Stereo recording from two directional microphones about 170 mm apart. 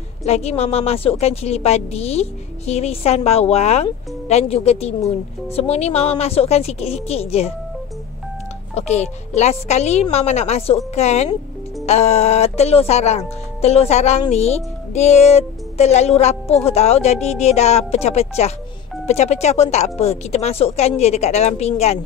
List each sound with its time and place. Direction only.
0.2 s a woman's voice: 40° left (ahead or behind)
8.7 s a woman's voice: 40° left (ahead or behind)